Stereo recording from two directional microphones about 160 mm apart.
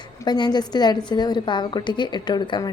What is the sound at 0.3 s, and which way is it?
A woman's voice, 25° left (ahead or behind).